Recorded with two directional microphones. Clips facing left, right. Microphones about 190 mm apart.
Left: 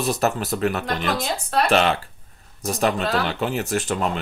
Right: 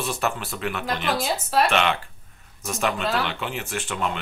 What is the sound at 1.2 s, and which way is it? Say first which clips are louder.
Speech: even; 5° right (ahead or behind).